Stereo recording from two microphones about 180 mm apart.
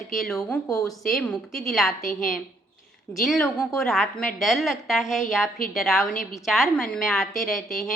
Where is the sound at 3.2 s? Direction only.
Centre (ahead or behind).